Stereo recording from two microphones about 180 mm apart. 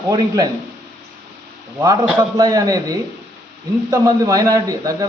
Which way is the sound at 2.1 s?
20° right (ahead or behind).